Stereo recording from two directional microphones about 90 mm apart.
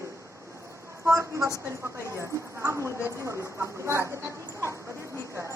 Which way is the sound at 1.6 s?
30° right (ahead or behind).